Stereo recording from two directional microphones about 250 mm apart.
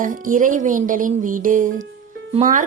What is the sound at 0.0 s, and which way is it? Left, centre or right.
A woman's voice, right.